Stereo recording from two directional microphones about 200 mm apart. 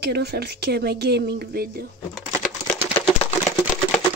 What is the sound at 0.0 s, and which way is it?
Speech, 55° right (ahead or behind).